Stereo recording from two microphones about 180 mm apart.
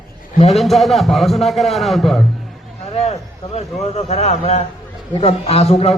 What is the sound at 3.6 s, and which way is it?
A man's voice, 35° left (ahead or behind).